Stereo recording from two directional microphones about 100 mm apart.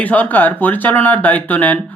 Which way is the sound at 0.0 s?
15° left (ahead or behind).